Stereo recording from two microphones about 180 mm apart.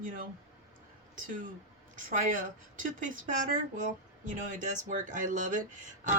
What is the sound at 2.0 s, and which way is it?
Speech, 45° right (ahead or behind).